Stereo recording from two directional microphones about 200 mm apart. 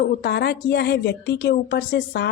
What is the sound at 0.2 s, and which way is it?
Speech, 55° left (ahead or behind).